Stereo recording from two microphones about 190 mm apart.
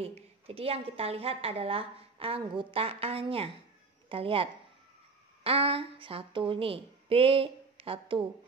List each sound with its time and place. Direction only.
0.0 s a woman's voice: 30° right (ahead or behind)